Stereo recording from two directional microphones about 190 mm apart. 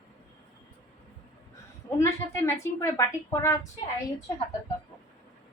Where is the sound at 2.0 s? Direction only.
15° left (ahead or behind).